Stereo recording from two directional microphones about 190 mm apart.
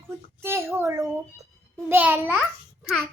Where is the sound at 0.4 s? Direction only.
15° right (ahead or behind).